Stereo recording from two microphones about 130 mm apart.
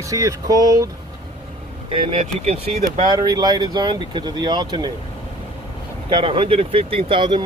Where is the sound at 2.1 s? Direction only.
55° right (ahead or behind).